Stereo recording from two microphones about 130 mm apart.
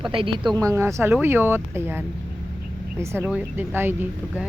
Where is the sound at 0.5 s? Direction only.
25° right (ahead or behind).